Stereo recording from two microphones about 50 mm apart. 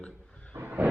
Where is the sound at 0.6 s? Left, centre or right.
Right.